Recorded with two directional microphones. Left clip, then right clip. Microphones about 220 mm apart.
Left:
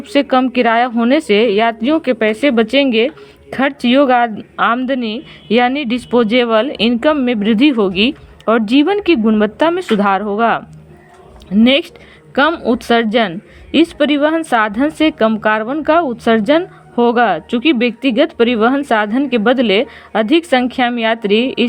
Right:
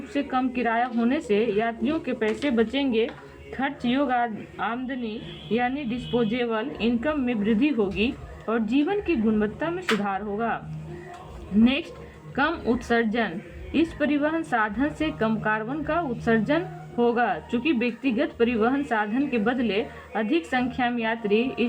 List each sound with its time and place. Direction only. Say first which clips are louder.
0.1 s a woman's voice: left 14 dB; 45° left (ahead or behind)
11.6 s a woman's voice: left 13 dB; 45° left (ahead or behind)